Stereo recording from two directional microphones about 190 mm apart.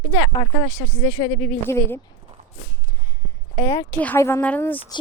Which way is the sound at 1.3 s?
5° left (ahead or behind).